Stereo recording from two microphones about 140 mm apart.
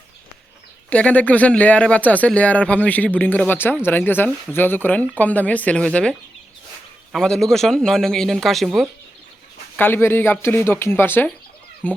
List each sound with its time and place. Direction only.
0.9 s a man's voice: 10° left (ahead or behind)
9.7 s speech: 15° left (ahead or behind)